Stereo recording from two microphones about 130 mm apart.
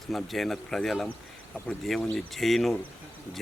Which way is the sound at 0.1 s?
Centre (ahead or behind).